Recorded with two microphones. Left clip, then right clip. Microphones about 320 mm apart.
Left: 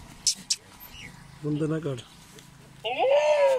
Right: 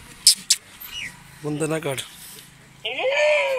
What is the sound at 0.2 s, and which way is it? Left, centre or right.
Vehicle, centre.